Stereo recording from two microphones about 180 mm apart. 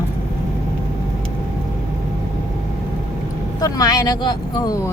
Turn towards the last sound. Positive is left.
turn(degrees=20)  # may be behind; listen again after turning